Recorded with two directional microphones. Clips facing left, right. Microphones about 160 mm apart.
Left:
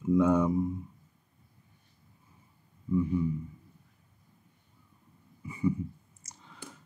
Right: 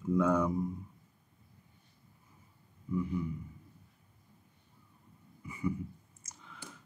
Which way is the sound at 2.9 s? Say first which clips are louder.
Left 6 dB; 25° left (ahead or behind).